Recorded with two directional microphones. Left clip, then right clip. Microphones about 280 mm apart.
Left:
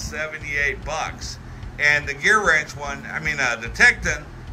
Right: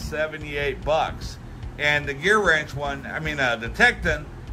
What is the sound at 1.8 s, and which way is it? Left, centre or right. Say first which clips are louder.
A man's voice: left 4 dB; centre.